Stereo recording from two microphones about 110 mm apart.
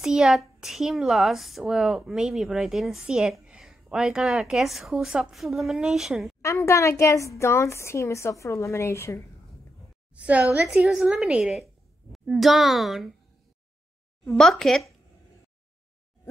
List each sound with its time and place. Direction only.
0.0 s a child's voice: 5° right (ahead or behind)
6.4 s a woman's voice: 25° left (ahead or behind)
10.1 s a woman's voice: 10° right (ahead or behind)
14.2 s a child's voice: 5° left (ahead or behind)